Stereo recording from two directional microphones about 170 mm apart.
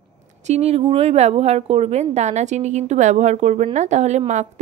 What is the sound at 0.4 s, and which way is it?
Speech, 40° right (ahead or behind).